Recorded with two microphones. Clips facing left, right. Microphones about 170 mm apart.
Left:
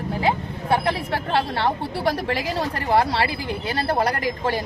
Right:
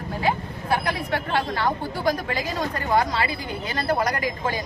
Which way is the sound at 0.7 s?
30° left (ahead or behind).